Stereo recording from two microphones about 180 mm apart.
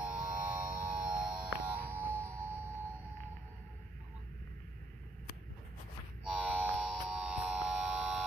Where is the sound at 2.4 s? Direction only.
10° right (ahead or behind).